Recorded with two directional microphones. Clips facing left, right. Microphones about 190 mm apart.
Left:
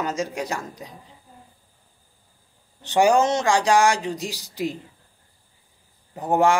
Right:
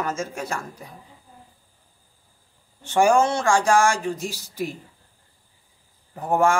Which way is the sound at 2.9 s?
15° left (ahead or behind).